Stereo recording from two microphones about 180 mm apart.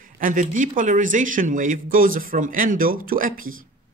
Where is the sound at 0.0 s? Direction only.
50° right (ahead or behind).